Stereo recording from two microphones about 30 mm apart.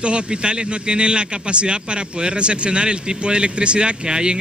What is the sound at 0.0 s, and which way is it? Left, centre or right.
Speech, right.